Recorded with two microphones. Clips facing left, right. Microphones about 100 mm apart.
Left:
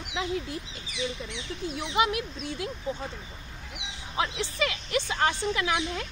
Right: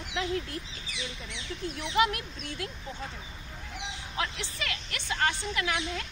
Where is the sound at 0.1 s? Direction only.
15° left (ahead or behind).